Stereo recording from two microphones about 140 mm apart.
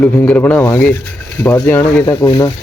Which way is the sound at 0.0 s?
10° left (ahead or behind).